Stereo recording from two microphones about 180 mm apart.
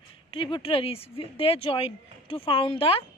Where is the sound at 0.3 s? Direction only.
30° left (ahead or behind).